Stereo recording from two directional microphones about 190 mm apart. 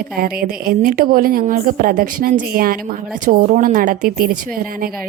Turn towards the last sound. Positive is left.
turn(degrees=-50)  # may be behind; listen again after turning